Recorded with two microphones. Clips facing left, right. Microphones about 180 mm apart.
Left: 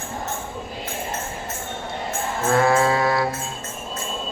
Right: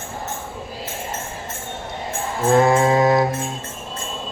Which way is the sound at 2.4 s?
20° right (ahead or behind).